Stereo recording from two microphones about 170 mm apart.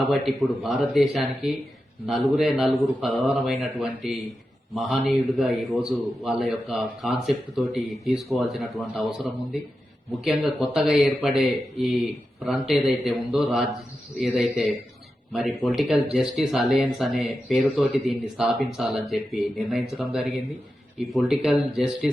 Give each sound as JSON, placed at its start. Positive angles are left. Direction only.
{"t": 0.1, "sound": "a man's voice", "side_deg": 0}